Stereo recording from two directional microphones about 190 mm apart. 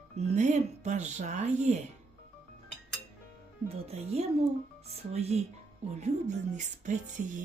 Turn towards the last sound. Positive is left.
turn(degrees=-40)  # may be behind; listen again after turning